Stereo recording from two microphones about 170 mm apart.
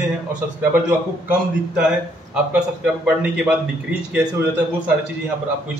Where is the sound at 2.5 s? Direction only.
10° right (ahead or behind).